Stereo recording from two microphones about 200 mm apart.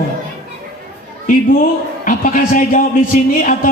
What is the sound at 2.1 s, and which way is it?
Speech, 40° left (ahead or behind).